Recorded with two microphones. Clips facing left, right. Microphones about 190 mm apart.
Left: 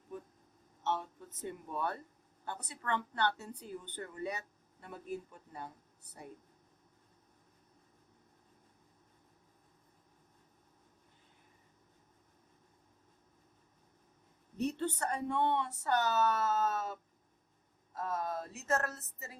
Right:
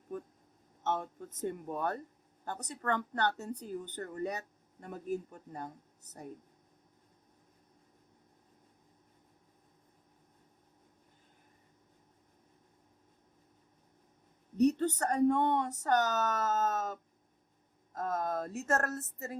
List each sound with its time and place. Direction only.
0.1 s a sound: 50° right (ahead or behind)
0.9 s speech: 45° right (ahead or behind)
14.6 s speech: 40° right (ahead or behind)